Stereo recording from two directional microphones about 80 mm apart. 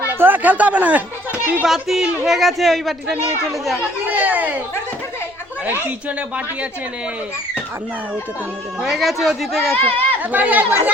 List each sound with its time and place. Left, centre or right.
0.1 s speech: right
1.6 s speech: centre
4.1 s a sound: right
5.6 s a woman's voice: right
8.8 s speech: centre
9.7 s speech: centre
10.3 s speech: centre